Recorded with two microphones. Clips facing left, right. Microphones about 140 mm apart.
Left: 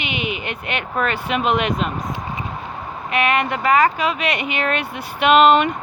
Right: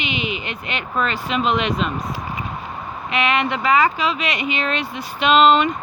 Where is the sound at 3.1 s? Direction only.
45° left (ahead or behind).